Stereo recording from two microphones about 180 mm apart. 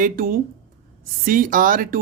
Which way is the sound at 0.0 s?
50° right (ahead or behind).